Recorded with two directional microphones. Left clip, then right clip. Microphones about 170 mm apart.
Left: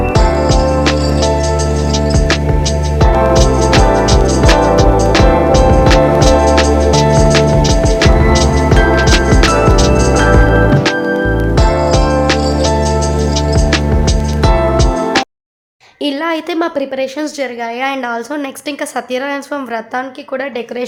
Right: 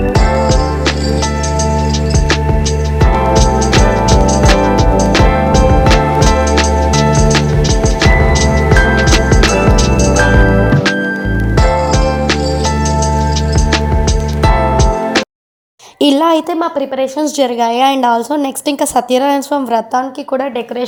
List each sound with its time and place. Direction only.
0.1 s music: centre (ahead or behind)
3.0 s music: centre (ahead or behind)
11.5 s music: centre (ahead or behind)
16.0 s a sound: 35° right (ahead or behind)
17.4 s a woman's voice: 35° right (ahead or behind)